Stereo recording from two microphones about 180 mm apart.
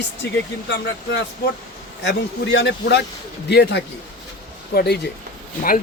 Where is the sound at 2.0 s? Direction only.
75° left (ahead or behind).